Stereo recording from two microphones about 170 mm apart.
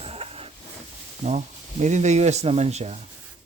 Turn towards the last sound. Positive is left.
turn(degrees=-40)  # may be behind; listen again after turning